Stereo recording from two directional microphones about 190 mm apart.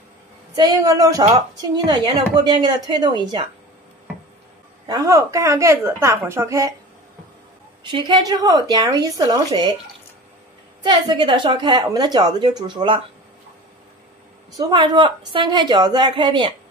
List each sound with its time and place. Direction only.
0.6 s a woman's voice: 20° right (ahead or behind)
4.8 s a woman's voice: 20° right (ahead or behind)
7.8 s a woman's voice: 25° right (ahead or behind)
10.8 s a woman's voice: 25° right (ahead or behind)
14.6 s a woman's voice: 25° right (ahead or behind)